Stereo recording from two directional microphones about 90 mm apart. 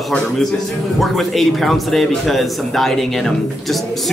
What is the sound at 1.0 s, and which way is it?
A man's voice, centre (ahead or behind).